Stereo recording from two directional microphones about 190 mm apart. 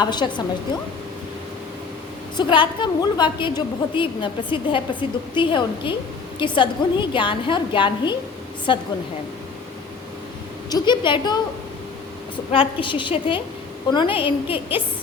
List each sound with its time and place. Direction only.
0.0 s a woman's voice: 25° left (ahead or behind)
2.3 s a woman's voice: 25° left (ahead or behind)
10.7 s a woman's voice: 20° left (ahead or behind)
12.5 s a woman's voice: 25° left (ahead or behind)